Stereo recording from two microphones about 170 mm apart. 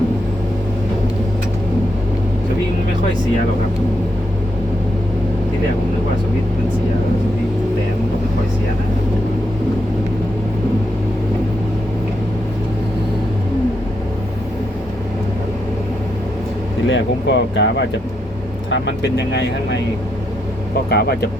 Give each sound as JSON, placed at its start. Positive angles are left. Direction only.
{"t": 16.8, "sound": "speech", "side_deg": 90}
{"t": 20.9, "sound": "speech", "side_deg": 70}